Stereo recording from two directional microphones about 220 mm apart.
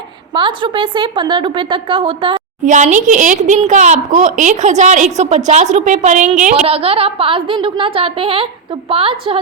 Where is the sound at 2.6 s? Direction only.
35° right (ahead or behind).